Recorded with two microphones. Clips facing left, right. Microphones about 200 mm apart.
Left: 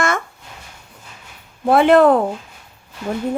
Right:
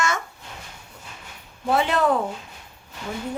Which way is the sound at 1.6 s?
55° left (ahead or behind).